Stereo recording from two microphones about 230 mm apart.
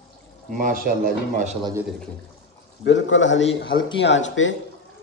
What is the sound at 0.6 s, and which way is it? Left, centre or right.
Speech, right.